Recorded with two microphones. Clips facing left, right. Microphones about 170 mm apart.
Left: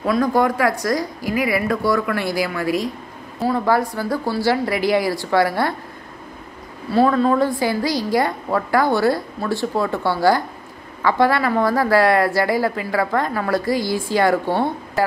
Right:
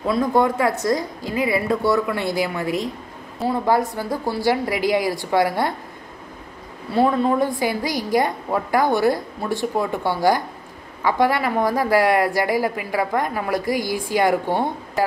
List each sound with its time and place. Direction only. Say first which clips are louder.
0.0 s a woman's voice: left 1 dB; 25° right (ahead or behind)
6.9 s a woman's voice: left 2 dB; 20° right (ahead or behind)